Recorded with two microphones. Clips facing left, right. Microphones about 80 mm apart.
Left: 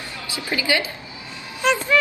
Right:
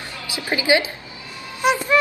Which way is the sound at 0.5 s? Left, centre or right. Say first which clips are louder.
Right 4 dB; right.